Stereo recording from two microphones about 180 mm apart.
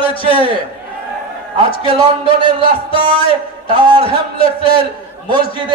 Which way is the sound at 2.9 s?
30° left (ahead or behind).